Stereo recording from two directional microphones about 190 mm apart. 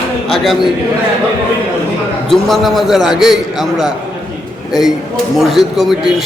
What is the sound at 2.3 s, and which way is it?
A man's voice, centre (ahead or behind).